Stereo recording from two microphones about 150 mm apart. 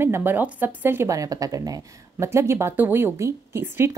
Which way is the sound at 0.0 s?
15° right (ahead or behind).